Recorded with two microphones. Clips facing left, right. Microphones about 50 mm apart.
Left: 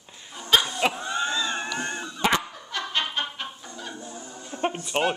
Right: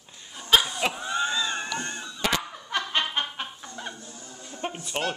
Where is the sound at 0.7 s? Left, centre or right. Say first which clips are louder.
Left 1 dB; centre; by 2.4 s left.